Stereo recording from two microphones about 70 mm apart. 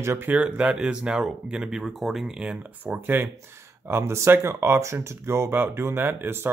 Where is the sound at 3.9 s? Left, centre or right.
Right.